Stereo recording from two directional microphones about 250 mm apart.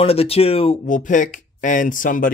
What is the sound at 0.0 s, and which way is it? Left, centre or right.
Speech, left.